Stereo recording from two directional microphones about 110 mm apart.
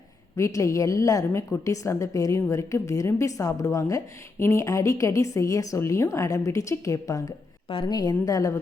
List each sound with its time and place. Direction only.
0.3 s a woman's voice: 30° left (ahead or behind)